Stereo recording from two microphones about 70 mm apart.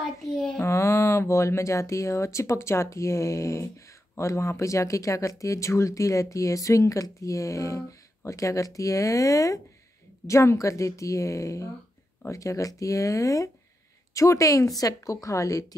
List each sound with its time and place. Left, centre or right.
0.6 s speech: left